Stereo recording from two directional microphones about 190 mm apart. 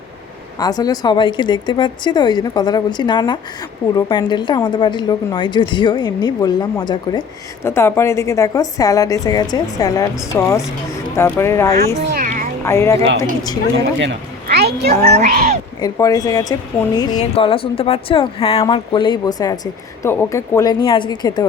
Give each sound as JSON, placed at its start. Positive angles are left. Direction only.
{"t": 0.6, "sound": "a woman's voice", "side_deg": 20}
{"t": 11.9, "sound": "a sound", "side_deg": -45}
{"t": 12.6, "sound": "speech", "side_deg": 15}
{"t": 14.4, "sound": "a sound", "side_deg": -55}
{"t": 15.1, "sound": "speech", "side_deg": -45}
{"t": 15.8, "sound": "a woman's voice", "side_deg": 20}